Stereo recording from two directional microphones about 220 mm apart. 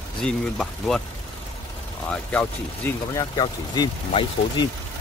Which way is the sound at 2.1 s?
5° left (ahead or behind).